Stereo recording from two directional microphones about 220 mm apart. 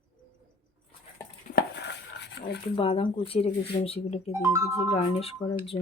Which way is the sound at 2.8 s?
25° left (ahead or behind).